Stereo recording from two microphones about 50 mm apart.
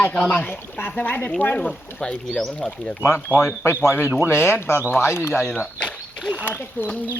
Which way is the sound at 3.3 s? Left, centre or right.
Left.